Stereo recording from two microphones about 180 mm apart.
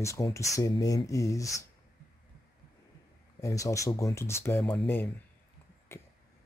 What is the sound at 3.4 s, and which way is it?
Speech, 15° left (ahead or behind).